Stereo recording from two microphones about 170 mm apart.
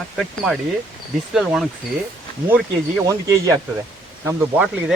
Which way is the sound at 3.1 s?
20° right (ahead or behind).